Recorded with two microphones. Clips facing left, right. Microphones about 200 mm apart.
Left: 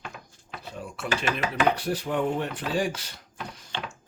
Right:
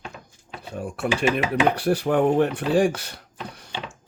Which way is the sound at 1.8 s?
60° right (ahead or behind).